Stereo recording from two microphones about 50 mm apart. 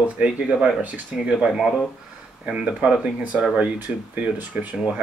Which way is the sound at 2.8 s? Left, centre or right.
Right.